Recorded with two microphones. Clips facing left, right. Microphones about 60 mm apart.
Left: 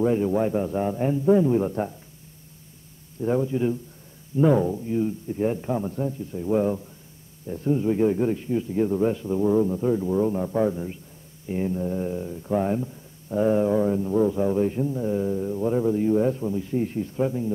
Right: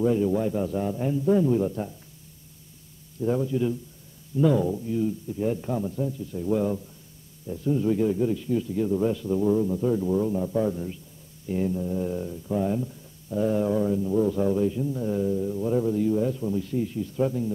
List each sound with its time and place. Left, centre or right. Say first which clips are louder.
0.0 s a man's voice: left 1 dB; left
3.2 s a man's voice: left 1 dB; left
6.3 s a man's voice: left 2 dB; left
8.5 s speech: left 1 dB; left
10.2 s a man's voice: left 2 dB; left
10.7 s a man's voice: left 1 dB; left
12.1 s speech: left 1 dB; centre
12.4 s a man's voice: left 3 dB; left
14.6 s a man's voice: left 2 dB; left
14.9 s speech: left 2 dB; centre
15.2 s a man's voice: left 1 dB; left
16.4 s speech: even; left
16.7 s a man's voice: left 2 dB; left
17.2 s speech: even; left